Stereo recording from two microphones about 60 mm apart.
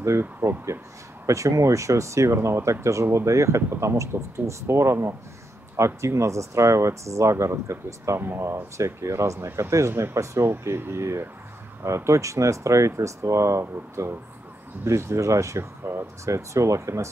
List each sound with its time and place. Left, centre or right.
0.0 s speech: right
1.2 s speech: right
8.2 s speech: right